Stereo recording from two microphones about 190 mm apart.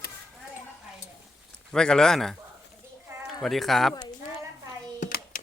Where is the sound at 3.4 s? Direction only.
Centre (ahead or behind).